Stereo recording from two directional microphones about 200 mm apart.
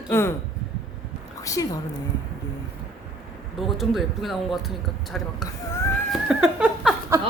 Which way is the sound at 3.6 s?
Centre (ahead or behind).